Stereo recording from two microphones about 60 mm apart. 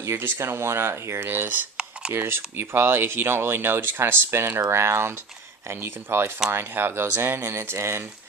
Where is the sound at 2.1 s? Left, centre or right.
Right.